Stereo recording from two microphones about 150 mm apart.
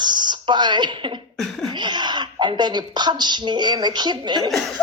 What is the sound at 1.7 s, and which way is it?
Speech, 30° right (ahead or behind).